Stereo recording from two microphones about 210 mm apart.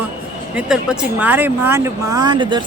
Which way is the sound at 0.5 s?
5° right (ahead or behind).